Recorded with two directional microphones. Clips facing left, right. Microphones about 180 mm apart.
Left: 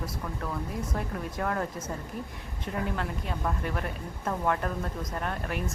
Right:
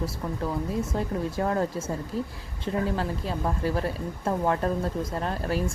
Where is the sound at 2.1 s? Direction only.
90° right.